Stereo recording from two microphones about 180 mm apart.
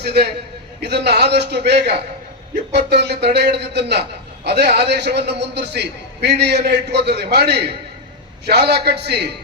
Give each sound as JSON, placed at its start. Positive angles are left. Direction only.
{"t": 0.0, "sound": "a man's voice", "side_deg": -65}